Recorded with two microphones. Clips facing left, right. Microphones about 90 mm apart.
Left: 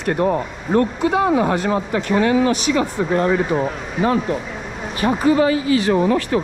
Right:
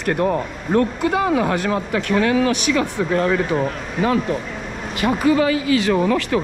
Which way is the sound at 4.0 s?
5° left (ahead or behind).